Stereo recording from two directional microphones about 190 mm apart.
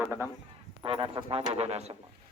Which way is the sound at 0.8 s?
25° right (ahead or behind).